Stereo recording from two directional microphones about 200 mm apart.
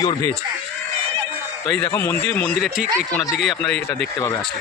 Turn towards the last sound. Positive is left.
turn(degrees=5)  # may be behind; listen again after turning